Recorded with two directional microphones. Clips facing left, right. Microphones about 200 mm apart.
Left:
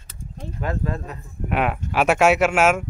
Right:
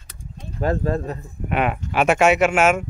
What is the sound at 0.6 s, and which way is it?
Speech, 35° right (ahead or behind).